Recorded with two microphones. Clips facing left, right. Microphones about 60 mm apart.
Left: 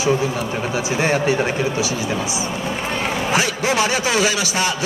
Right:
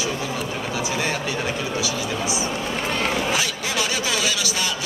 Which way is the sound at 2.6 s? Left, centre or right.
Centre.